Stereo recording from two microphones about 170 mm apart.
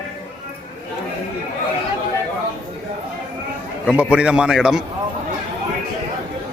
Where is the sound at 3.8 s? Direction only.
5° right (ahead or behind).